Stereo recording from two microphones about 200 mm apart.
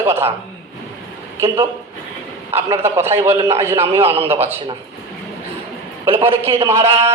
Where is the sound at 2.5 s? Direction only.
10° right (ahead or behind).